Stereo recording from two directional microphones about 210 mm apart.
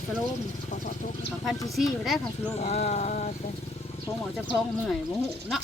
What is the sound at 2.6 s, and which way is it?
Speech, 30° left (ahead or behind).